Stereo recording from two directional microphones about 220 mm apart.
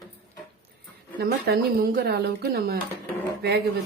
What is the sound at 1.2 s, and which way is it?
A woman's voice, 45° right (ahead or behind).